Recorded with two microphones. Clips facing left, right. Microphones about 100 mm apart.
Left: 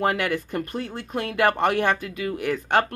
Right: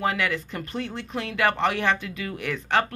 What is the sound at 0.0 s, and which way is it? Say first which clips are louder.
Speech: left 2 dB; 50° left (ahead or behind).